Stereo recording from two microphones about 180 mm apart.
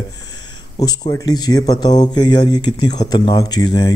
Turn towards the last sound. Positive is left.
turn(degrees=25)  # may be behind; listen again after turning